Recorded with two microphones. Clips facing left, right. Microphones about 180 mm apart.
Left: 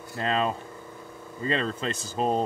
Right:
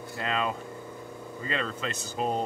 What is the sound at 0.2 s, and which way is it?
Speech, 35° left (ahead or behind).